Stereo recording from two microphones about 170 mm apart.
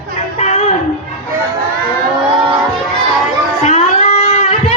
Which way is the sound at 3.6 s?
40° left (ahead or behind).